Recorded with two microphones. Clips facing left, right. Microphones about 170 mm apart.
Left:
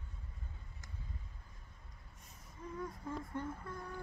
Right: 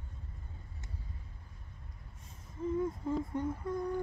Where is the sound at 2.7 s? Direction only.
25° right (ahead or behind).